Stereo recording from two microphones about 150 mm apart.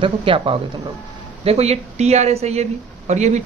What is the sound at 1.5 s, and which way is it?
Speech, 45° right (ahead or behind).